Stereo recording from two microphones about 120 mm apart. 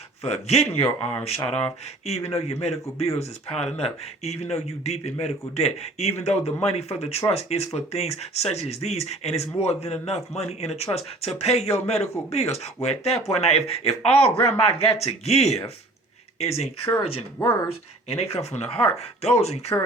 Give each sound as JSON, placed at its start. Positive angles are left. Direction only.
{"t": 0.2, "sound": "speech", "side_deg": 60}
{"t": 17.4, "sound": "speech", "side_deg": 20}
{"t": 18.1, "sound": "speech", "side_deg": 55}